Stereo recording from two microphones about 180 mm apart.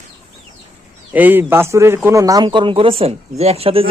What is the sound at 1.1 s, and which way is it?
A man's voice, 10° right (ahead or behind).